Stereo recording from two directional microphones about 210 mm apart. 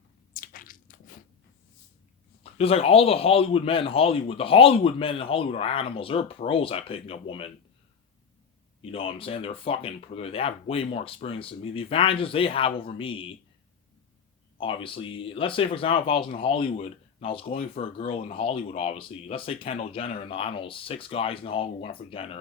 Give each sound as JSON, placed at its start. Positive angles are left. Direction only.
{"t": 0.3, "sound": "biting", "side_deg": 40}
{"t": 2.4, "sound": "a man's voice", "side_deg": 30}
{"t": 8.8, "sound": "a man's voice", "side_deg": 25}
{"t": 14.6, "sound": "a man's voice", "side_deg": 25}